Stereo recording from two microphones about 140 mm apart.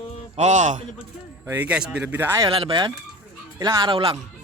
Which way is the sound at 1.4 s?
15° right (ahead or behind).